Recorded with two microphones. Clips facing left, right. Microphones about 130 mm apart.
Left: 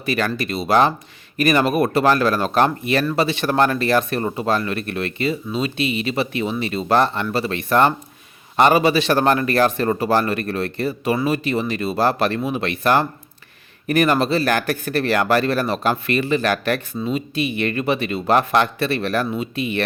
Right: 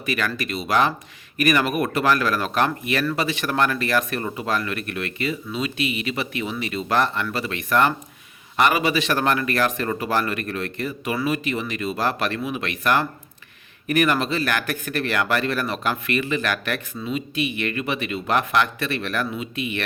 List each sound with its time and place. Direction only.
0.0 s speech: 30° left (ahead or behind)